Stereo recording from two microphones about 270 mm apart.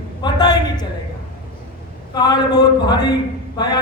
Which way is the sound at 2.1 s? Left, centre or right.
Centre.